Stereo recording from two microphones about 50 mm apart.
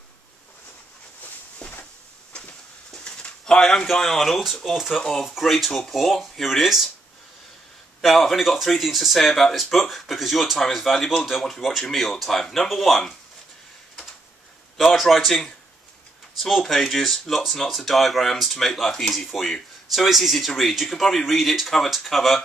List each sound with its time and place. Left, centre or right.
1.6 s a sound: centre
3.6 s speech: centre
8.0 s speech: centre
14.9 s speech: centre